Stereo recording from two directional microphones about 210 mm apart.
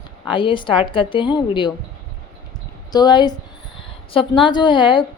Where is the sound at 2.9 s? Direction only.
20° left (ahead or behind).